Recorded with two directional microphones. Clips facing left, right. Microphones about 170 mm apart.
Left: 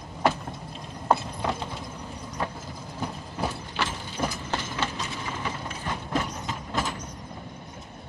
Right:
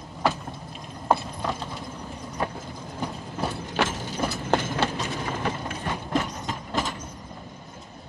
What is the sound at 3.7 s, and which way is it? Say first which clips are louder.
Ratchet: right 5 dB; 45° right (ahead or behind).